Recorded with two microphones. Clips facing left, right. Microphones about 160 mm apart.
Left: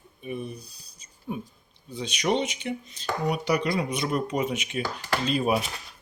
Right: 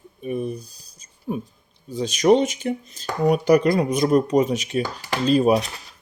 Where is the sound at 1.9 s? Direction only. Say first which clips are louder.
Right 10 dB; 40° right (ahead or behind).